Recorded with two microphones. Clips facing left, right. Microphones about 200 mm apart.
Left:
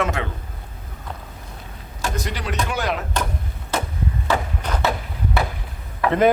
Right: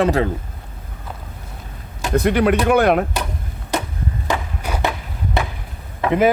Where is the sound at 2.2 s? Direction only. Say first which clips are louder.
Right 14 dB; 60° right (ahead or behind).